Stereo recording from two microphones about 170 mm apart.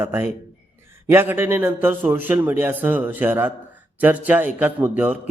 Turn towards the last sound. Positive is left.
turn(degrees=-10)  # may be behind; listen again after turning